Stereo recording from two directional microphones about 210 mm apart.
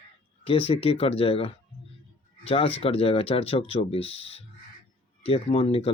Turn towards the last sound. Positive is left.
turn(degrees=25)  # may be behind; listen again after turning